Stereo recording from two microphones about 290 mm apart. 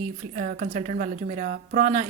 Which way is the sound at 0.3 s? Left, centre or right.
Right.